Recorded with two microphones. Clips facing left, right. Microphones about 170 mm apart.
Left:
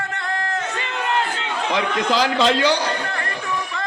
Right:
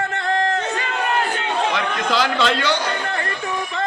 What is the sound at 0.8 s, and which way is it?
Crowd, 25° left (ahead or behind).